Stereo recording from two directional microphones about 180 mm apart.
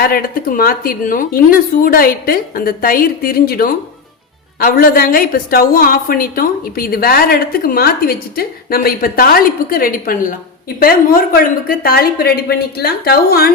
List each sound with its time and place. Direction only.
0.0 s a woman's voice: 55° left (ahead or behind)